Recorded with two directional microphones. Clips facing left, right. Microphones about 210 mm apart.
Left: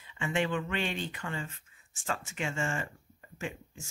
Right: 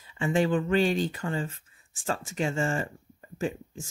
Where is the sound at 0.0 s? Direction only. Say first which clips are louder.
Right 6 dB; 35° right (ahead or behind).